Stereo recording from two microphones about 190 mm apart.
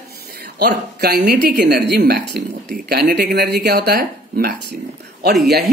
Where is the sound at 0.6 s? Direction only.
60° right (ahead or behind).